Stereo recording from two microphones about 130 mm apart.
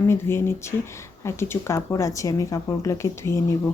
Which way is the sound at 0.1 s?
20° left (ahead or behind).